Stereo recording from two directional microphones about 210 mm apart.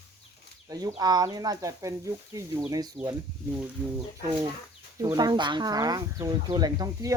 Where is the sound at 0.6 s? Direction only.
20° right (ahead or behind).